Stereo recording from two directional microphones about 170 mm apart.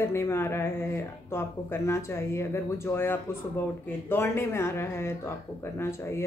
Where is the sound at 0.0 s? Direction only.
15° left (ahead or behind).